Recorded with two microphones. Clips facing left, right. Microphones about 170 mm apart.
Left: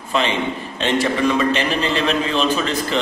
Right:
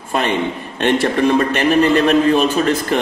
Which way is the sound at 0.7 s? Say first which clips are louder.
Right 4 dB; 55° right (ahead or behind).